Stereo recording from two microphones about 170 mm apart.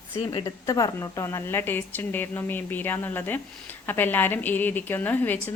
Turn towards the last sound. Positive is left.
turn(degrees=10)  # may be behind; listen again after turning